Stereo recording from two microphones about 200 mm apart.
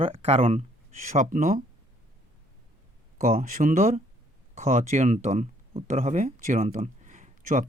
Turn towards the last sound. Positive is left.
turn(degrees=-40)  # may be behind; listen again after turning